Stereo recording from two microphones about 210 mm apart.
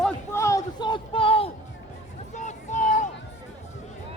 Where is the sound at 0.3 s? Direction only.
15° left (ahead or behind); by 3.1 s 35° left (ahead or behind).